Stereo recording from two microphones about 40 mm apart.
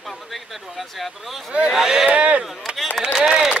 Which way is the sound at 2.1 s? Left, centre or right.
Right.